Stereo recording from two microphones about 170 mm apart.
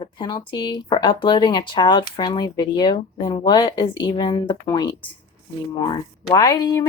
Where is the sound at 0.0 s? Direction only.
25° left (ahead or behind).